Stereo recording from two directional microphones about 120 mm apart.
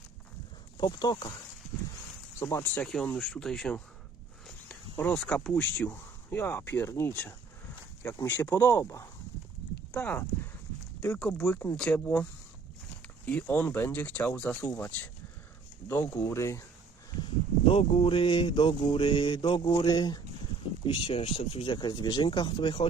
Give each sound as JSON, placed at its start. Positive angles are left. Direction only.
{"t": 0.8, "sound": "speech", "side_deg": 35}
{"t": 2.4, "sound": "speech", "side_deg": 20}
{"t": 2.7, "sound": "speech", "side_deg": 5}
{"t": 4.9, "sound": "speech", "side_deg": 10}
{"t": 10.0, "sound": "speech", "side_deg": 15}
{"t": 17.7, "sound": "a sound", "side_deg": 50}
{"t": 20.8, "sound": "a sound", "side_deg": 45}